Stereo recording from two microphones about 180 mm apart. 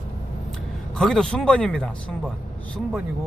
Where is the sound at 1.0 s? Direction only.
5° left (ahead or behind).